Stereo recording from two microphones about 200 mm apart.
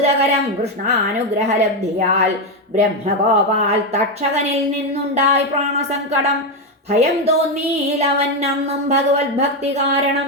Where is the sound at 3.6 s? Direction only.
30° right (ahead or behind).